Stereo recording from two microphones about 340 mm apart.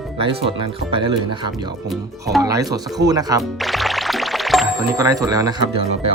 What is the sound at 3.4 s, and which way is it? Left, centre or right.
Music, centre.